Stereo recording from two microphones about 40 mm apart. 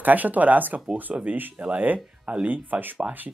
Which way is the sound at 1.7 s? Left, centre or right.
Right.